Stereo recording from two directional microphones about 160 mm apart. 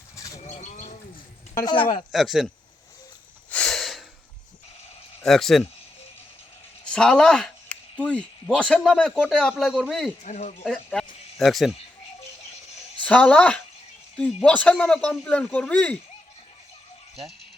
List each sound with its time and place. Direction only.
0.4 s bird: 50° left (ahead or behind)
1.6 s speech: 30° left (ahead or behind)
2.1 s speech: centre (ahead or behind)
3.5 s a sound: 5° left (ahead or behind)
5.2 s speech: centre (ahead or behind)
6.9 s speech: 5° left (ahead or behind)
10.2 s speech: 45° left (ahead or behind)
10.9 s speech: centre (ahead or behind)
13.0 s a woman's voice: 10° left (ahead or behind)